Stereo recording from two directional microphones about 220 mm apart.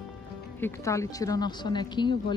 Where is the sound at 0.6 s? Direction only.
10° left (ahead or behind).